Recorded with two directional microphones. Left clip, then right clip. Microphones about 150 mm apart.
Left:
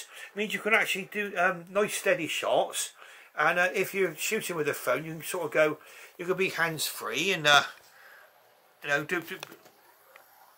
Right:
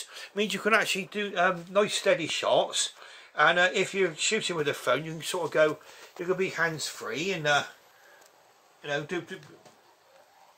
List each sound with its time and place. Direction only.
0.1 s speech: 30° right (ahead or behind)
1.1 s speech: 15° right (ahead or behind)
2.0 s speech: 20° right (ahead or behind)
2.4 s speech: 5° right (ahead or behind)
5.4 s speech: 5° left (ahead or behind)
7.1 s speech: 10° left (ahead or behind)
8.8 s speech: 5° right (ahead or behind)